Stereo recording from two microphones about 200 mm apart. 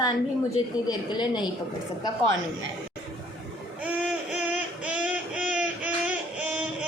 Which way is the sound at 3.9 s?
5° right (ahead or behind).